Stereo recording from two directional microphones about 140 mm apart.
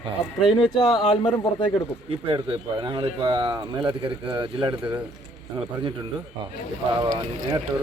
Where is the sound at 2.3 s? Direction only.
35° right (ahead or behind).